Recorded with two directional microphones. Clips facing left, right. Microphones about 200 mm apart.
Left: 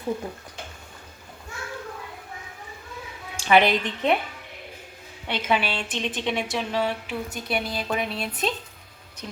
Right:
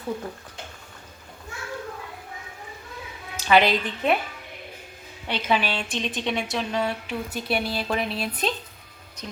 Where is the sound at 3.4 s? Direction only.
20° left (ahead or behind).